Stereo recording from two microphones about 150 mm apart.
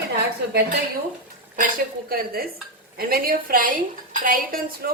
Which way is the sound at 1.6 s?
80° right.